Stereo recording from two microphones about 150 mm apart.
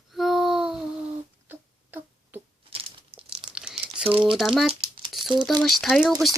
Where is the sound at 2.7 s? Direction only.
40° right (ahead or behind).